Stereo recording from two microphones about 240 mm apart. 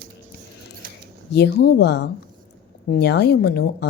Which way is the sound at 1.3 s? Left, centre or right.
Left.